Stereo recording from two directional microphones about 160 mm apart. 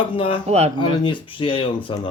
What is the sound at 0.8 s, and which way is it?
Speech, 30° left (ahead or behind).